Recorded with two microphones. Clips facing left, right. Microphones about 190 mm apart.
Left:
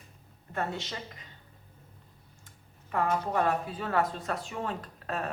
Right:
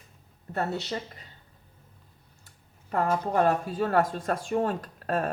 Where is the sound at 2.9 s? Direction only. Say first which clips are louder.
Right 3 dB; 40° right (ahead or behind).